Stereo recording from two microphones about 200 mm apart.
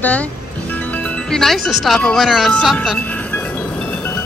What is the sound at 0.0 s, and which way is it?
Music, 5° left (ahead or behind).